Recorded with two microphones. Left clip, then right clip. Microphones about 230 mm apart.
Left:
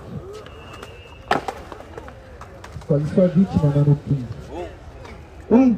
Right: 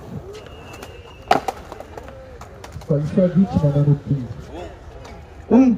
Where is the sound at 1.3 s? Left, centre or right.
Right.